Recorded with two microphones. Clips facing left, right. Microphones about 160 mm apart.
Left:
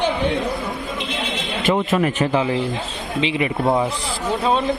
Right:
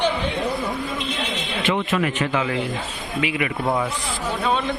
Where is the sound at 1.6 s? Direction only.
40° left (ahead or behind).